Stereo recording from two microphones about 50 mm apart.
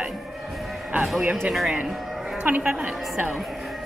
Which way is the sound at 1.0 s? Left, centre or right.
Centre.